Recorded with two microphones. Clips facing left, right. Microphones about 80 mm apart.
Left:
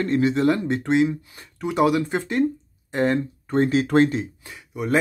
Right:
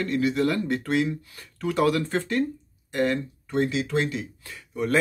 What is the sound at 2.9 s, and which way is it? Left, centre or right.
Speech, left.